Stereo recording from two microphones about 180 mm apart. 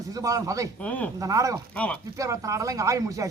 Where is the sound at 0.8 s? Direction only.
10° left (ahead or behind).